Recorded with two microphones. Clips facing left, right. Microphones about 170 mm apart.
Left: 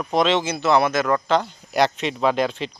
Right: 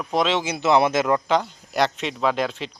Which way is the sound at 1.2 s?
10° right (ahead or behind).